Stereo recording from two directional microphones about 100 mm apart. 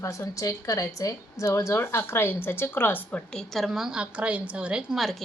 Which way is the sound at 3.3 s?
5° left (ahead or behind).